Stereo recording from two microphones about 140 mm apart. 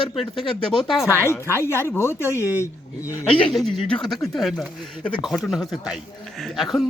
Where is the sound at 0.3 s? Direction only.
35° left (ahead or behind).